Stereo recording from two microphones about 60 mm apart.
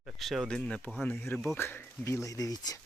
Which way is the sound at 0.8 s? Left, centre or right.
Left.